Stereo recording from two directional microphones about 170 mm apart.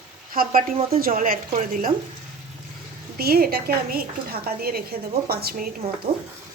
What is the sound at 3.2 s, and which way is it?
A woman's voice, 65° right (ahead or behind).